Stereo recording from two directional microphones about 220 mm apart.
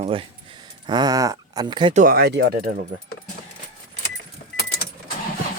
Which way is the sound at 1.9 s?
40° right (ahead or behind).